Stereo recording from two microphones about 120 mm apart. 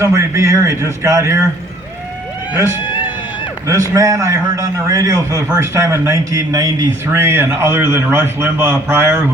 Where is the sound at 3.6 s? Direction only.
25° right (ahead or behind).